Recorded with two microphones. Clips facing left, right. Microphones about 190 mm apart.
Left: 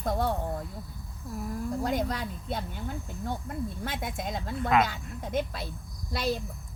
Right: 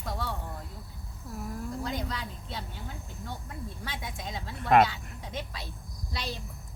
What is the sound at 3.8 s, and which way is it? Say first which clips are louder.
A woman's voice: left 5 dB; 50° left (ahead or behind).